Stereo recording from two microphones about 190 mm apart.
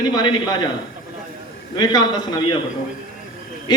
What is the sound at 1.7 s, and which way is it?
Speech, 20° left (ahead or behind).